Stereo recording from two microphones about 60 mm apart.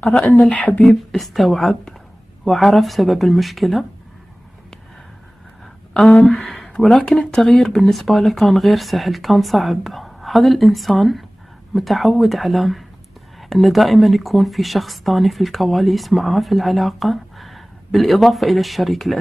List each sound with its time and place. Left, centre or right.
0.4 s speech: left
1.1 s speech: centre
5.9 s speech: centre